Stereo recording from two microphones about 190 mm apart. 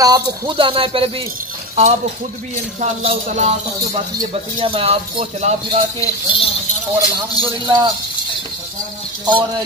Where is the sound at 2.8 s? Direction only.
35° right (ahead or behind).